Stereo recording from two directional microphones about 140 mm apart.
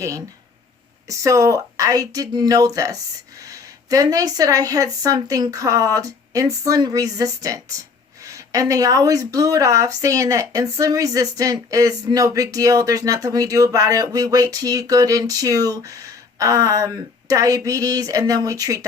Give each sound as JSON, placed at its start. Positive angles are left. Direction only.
{"t": 1.0, "sound": "speech", "side_deg": -25}